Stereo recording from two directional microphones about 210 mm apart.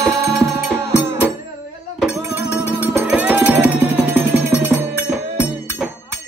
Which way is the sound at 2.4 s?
10° right (ahead or behind).